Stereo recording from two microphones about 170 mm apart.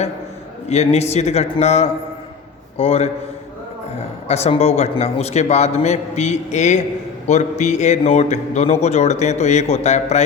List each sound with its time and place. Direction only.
0.7 s a man's voice: 40° left (ahead or behind)
4.3 s a man's voice: 40° left (ahead or behind)